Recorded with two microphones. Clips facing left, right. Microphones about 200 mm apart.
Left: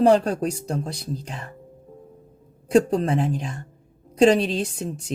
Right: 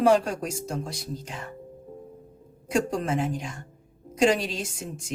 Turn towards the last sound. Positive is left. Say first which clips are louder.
# left 6 dB
turn(degrees=35)  # may be behind; listen again after turning